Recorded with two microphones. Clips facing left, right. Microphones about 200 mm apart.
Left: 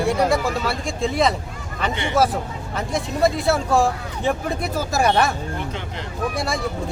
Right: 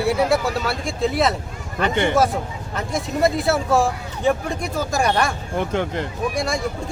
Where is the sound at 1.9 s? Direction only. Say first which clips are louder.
Right 9 dB; 50° right (ahead or behind).